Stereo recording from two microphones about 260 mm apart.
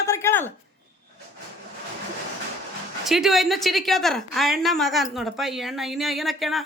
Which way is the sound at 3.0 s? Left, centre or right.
Centre.